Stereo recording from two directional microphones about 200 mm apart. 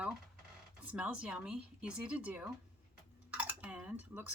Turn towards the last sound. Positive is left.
turn(degrees=-5)  # may be behind; listen again after turning